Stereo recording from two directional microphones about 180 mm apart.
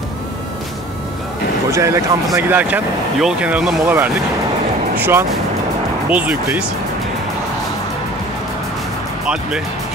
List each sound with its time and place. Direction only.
1.7 s speech: 15° right (ahead or behind)
9.2 s speech: 5° right (ahead or behind)